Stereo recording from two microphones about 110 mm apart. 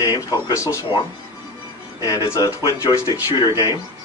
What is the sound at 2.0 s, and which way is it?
A man's voice, 35° left (ahead or behind).